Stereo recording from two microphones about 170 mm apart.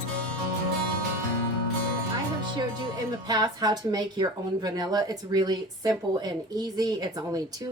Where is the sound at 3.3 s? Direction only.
25° right (ahead or behind).